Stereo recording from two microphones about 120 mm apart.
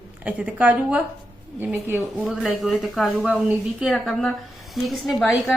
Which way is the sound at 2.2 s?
Centre (ahead or behind).